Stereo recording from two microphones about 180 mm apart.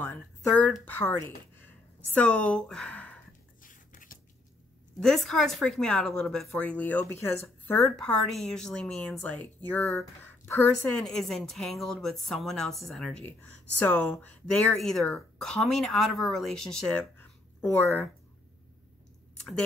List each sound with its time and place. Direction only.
0.0 s a woman's voice: 10° left (ahead or behind)
3.6 s a sound: 50° left (ahead or behind)
5.0 s speech: centre (ahead or behind)